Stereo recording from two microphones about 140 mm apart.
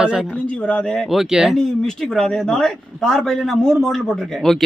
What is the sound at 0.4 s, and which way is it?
Speech, 10° left (ahead or behind).